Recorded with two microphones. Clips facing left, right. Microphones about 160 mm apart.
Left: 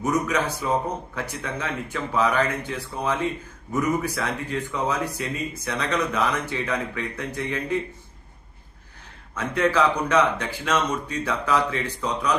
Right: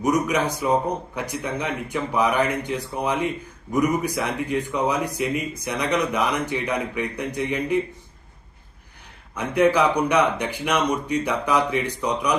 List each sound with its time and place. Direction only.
0.0 s speech: 15° right (ahead or behind)
9.3 s speech: 15° right (ahead or behind)